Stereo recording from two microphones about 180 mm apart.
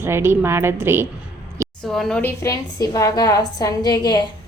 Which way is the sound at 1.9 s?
5° left (ahead or behind).